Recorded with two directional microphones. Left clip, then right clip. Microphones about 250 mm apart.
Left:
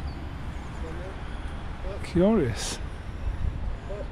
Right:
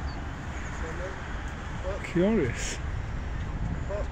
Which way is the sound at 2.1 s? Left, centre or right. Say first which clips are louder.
Left 3 dB; left.